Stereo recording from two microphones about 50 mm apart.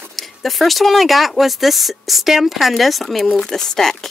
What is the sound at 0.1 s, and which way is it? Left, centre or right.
Speech, centre.